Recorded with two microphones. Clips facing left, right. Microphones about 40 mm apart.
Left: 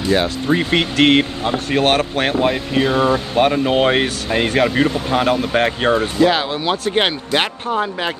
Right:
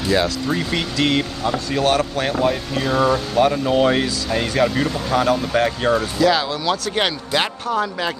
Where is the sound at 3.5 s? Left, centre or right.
Left.